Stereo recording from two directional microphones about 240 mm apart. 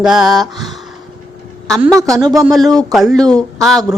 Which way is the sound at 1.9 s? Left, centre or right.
Centre.